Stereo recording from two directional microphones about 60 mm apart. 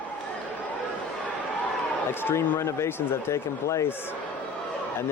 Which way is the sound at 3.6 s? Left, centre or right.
Left.